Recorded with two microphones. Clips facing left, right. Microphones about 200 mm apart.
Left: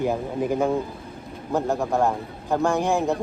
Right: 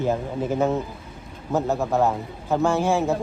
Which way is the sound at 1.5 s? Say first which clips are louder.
Right 1 dB; centre (ahead or behind).